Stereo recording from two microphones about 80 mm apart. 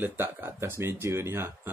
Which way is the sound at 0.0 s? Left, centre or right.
Right.